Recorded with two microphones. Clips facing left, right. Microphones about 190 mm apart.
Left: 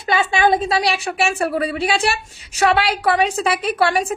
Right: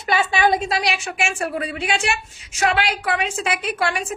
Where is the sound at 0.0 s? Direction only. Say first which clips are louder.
Left 2 dB; 25° left (ahead or behind).